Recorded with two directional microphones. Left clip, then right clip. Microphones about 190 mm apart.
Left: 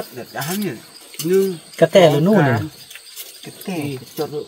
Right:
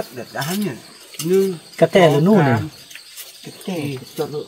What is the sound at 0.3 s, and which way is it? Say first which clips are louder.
Speech: even; 10° right (ahead or behind).